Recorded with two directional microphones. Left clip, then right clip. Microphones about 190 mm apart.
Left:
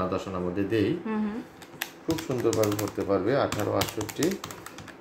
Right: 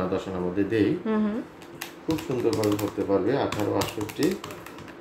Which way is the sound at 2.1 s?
30° left (ahead or behind).